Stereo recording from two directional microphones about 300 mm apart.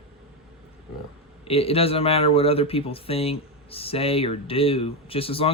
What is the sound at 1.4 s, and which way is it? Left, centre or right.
Speech, centre.